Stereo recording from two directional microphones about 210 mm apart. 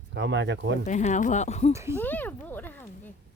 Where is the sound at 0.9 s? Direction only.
35° left (ahead or behind).